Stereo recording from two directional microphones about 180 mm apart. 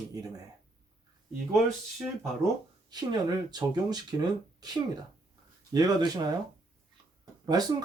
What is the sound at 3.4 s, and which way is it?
Speech, 25° right (ahead or behind).